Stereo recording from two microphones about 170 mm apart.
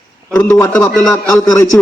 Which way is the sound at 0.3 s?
15° left (ahead or behind).